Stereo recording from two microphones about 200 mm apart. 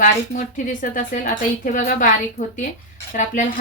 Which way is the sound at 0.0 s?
40° left (ahead or behind).